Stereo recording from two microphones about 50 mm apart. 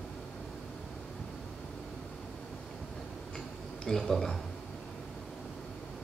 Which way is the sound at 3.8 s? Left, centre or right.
Centre.